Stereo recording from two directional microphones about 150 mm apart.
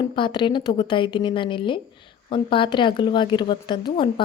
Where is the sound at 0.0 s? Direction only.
30° left (ahead or behind).